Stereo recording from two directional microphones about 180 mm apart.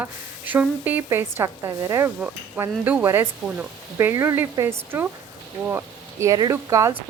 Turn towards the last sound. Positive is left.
turn(degrees=-15)  # may be behind; listen again after turning